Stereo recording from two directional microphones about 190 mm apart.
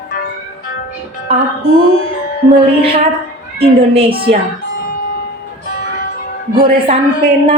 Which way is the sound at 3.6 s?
30° right (ahead or behind).